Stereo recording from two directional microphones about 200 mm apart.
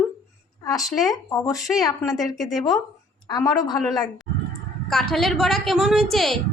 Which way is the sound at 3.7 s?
Centre (ahead or behind).